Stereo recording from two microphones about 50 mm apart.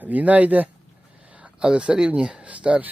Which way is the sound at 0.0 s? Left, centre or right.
Right.